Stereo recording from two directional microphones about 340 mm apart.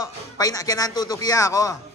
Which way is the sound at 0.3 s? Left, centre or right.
Centre.